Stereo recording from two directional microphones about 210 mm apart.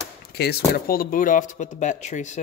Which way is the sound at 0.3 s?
50° left (ahead or behind).